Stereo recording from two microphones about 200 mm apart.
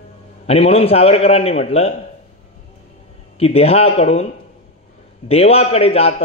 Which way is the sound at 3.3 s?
30° left (ahead or behind).